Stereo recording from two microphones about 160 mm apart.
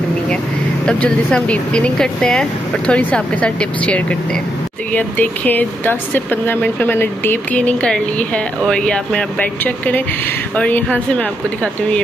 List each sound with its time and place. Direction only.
0.8 s speech: 5° left (ahead or behind)